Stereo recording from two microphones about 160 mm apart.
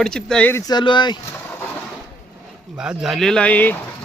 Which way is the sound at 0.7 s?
30° left (ahead or behind).